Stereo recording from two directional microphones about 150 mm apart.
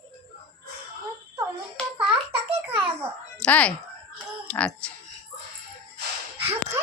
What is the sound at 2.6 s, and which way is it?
Babbling, 15° right (ahead or behind).